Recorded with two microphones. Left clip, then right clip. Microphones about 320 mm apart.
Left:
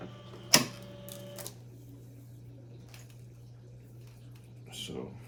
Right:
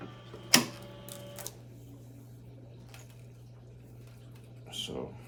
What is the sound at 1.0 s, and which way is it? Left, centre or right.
Printer, centre.